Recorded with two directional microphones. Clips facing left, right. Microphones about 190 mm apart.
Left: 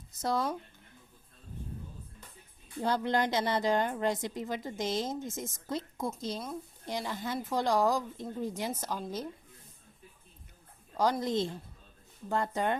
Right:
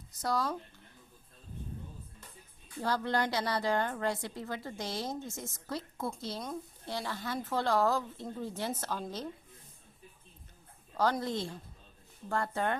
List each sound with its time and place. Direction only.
0.1 s speech: 25° left (ahead or behind)
2.8 s a woman's voice: 20° left (ahead or behind)
10.9 s a woman's voice: 15° left (ahead or behind)